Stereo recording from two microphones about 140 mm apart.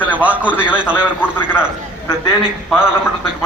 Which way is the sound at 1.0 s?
15° left (ahead or behind).